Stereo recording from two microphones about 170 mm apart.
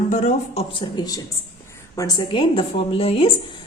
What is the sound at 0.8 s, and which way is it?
Speech, 25° left (ahead or behind).